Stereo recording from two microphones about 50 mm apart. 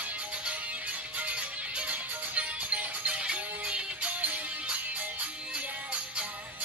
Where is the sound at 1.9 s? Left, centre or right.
Right.